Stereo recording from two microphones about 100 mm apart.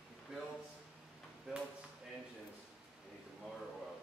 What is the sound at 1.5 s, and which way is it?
Chop, 5° right (ahead or behind).